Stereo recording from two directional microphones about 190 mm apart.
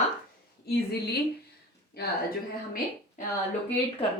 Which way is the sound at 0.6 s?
60° left (ahead or behind).